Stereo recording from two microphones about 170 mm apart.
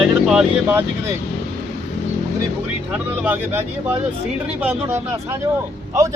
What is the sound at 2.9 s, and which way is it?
Speech, 10° right (ahead or behind).